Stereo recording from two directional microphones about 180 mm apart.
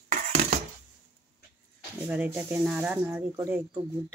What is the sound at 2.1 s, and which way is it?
Speech, 10° right (ahead or behind).